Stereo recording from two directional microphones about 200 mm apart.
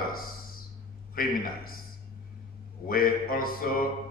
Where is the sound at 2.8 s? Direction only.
45° left (ahead or behind).